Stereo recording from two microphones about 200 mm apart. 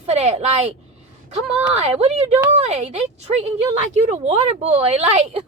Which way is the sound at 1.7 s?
30° right (ahead or behind).